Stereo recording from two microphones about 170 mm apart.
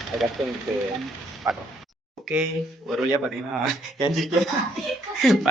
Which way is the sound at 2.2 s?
Centre (ahead or behind).